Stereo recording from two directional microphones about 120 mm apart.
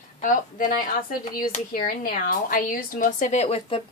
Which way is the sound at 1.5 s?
75° left (ahead or behind).